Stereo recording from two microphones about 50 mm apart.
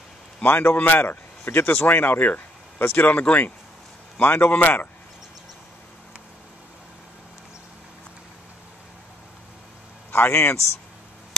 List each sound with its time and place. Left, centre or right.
0.4 s a man's voice: left
10.1 s a man's voice: left